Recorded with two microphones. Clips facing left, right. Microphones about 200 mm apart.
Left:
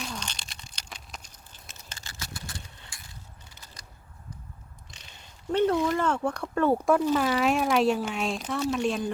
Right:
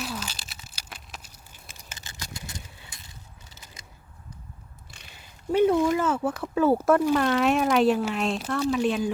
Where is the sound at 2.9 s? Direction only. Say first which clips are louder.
Even; 20° right (ahead or behind).